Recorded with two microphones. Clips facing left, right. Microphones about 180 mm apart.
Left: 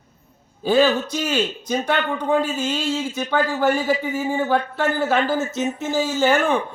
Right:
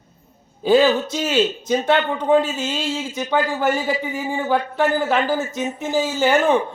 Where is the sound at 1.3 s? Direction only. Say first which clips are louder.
Right 5 dB; 20° right (ahead or behind).